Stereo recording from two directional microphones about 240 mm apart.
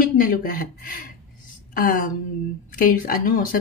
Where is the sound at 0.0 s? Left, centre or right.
Left.